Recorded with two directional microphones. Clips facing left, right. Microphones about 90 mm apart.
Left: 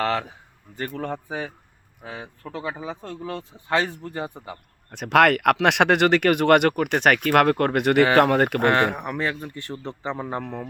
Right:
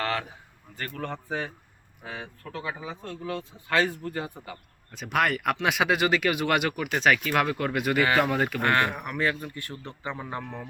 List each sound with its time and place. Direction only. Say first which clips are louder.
0.0 s a man's voice: left 5 dB; 25° left (ahead or behind)
4.9 s speech: left 8 dB; 75° left (ahead or behind); by 8.6 s 60° left (ahead or behind)
8.6 s speech: left 5 dB; 25° left (ahead or behind)